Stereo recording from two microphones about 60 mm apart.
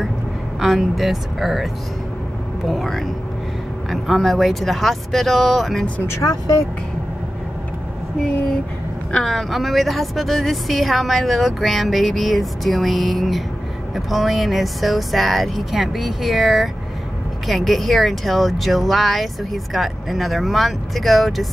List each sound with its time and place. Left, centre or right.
0.6 s a woman's voice: centre
6.2 s speech: left
9.2 s a woman's voice: centre